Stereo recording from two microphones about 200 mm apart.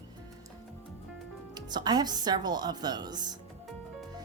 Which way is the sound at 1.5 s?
20° right (ahead or behind).